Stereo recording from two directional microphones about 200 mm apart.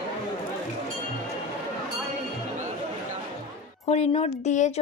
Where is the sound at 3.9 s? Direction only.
35° left (ahead or behind).